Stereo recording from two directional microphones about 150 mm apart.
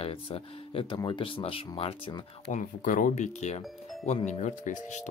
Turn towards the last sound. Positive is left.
turn(degrees=55)  # may be behind; listen again after turning